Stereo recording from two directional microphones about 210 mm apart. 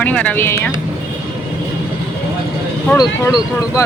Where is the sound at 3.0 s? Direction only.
15° left (ahead or behind).